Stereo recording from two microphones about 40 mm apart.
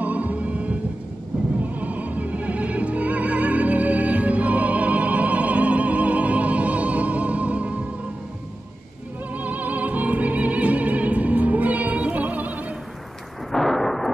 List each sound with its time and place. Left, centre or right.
0.0 s music: right
9.3 s music: right
13.5 s thunder: centre